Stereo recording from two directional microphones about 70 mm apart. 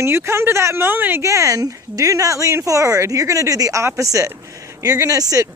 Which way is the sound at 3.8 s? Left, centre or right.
Right.